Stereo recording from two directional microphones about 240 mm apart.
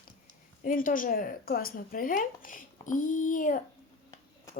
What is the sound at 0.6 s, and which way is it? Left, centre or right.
Speech, left.